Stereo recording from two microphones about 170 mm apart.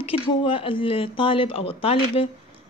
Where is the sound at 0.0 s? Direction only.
30° left (ahead or behind).